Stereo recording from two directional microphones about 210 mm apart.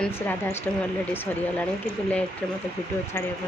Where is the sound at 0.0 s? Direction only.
10° left (ahead or behind).